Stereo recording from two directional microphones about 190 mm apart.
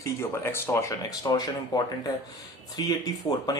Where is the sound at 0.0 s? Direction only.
15° left (ahead or behind).